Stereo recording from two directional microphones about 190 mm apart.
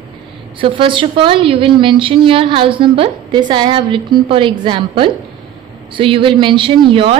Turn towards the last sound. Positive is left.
turn(degrees=-30)  # may be behind; listen again after turning